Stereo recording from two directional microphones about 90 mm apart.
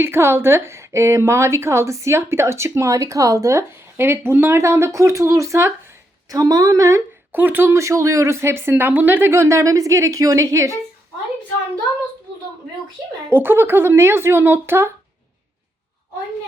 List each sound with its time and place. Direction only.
0.0 s a woman's voice: 25° right (ahead or behind)
6.2 s a woman's voice: 45° right (ahead or behind)
7.3 s speech: 20° right (ahead or behind)
9.3 s a woman's voice: 35° right (ahead or behind)
13.3 s speech: 25° right (ahead or behind)